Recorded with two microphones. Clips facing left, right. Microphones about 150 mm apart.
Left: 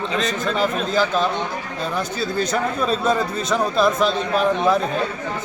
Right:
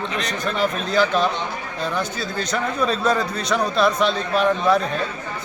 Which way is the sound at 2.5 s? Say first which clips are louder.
Left 1 dB; 5° left (ahead or behind).